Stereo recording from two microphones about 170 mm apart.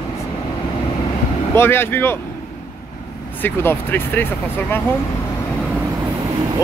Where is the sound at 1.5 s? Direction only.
15° left (ahead or behind).